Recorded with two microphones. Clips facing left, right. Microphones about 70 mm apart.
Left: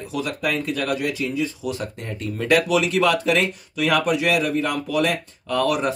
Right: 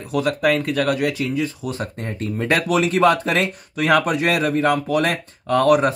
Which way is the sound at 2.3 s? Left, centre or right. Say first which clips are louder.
Even; right.